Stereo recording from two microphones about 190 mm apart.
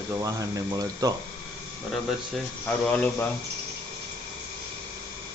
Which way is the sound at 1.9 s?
5° left (ahead or behind).